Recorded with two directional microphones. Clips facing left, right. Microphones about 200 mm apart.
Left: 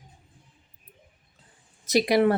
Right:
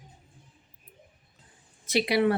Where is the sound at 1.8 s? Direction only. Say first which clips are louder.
Left 3 dB; 40° left (ahead or behind).